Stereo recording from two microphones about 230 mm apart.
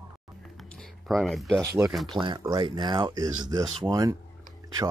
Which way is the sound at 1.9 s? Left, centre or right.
Centre.